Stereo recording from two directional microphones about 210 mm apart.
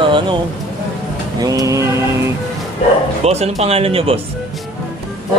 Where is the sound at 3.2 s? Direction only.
30° right (ahead or behind).